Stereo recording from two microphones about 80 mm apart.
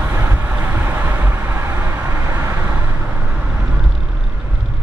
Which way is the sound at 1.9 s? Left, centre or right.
Right.